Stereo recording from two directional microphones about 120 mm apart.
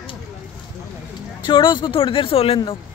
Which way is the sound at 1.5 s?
40° left (ahead or behind).